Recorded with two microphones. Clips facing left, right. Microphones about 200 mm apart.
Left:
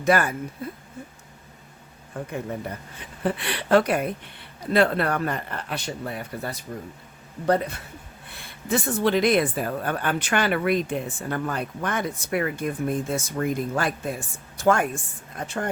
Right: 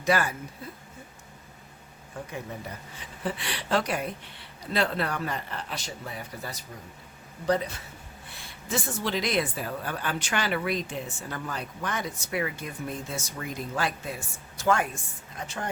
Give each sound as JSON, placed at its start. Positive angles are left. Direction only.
{"t": 0.0, "sound": "speech", "side_deg": 55}
{"t": 2.2, "sound": "speech", "side_deg": 55}
{"t": 8.4, "sound": "speech", "side_deg": 55}